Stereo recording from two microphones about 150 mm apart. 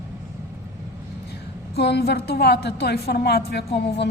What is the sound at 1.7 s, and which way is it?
A woman's voice, 90° left.